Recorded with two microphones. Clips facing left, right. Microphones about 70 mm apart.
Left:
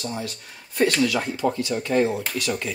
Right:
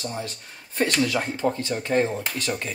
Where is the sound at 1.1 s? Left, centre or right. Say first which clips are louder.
Left 1 dB; right.